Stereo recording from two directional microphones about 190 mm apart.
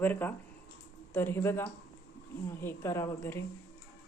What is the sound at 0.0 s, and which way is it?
A woman's voice, 10° left (ahead or behind).